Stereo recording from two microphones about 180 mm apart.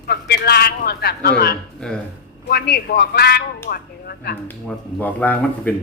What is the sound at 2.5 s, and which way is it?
A man's voice, 60° left (ahead or behind).